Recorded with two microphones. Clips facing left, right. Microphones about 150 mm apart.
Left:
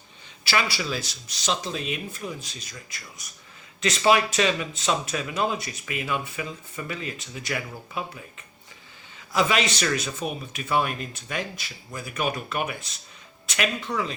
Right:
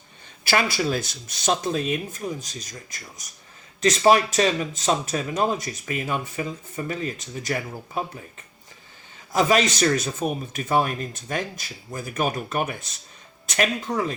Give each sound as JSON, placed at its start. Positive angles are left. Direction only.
{"t": 0.4, "sound": "a man's voice", "side_deg": -45}
{"t": 9.3, "sound": "a man's voice", "side_deg": -40}